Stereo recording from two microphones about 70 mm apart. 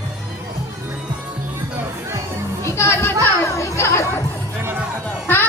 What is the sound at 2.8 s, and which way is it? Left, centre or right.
Children playing, left.